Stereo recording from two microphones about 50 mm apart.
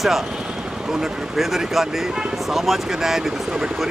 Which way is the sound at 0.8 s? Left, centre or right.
Centre.